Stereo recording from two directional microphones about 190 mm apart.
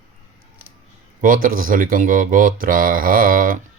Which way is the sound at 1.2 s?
45° right (ahead or behind).